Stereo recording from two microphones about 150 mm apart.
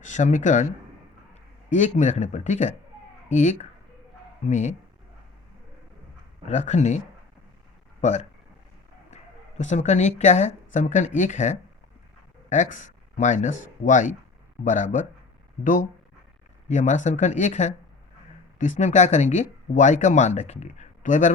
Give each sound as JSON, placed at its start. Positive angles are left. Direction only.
{"t": 0.0, "sound": "a man's voice", "side_deg": 55}
{"t": 6.5, "sound": "speech", "side_deg": 50}
{"t": 8.0, "sound": "speech", "side_deg": 50}
{"t": 9.6, "sound": "speech", "side_deg": 50}